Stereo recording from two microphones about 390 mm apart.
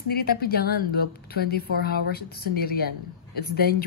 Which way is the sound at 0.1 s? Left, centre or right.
Left.